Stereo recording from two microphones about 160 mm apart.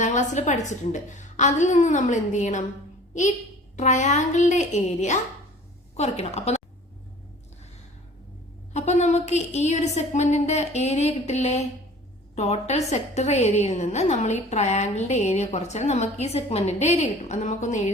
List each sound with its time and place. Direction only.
0.0 s a woman's voice: 50° left (ahead or behind)
3.8 s a woman's voice: 50° left (ahead or behind)
8.7 s a woman's voice: 45° left (ahead or behind)